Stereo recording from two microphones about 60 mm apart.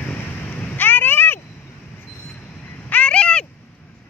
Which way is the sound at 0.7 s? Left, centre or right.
Left.